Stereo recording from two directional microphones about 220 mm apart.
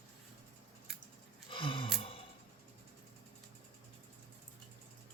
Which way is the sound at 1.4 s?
25° left (ahead or behind).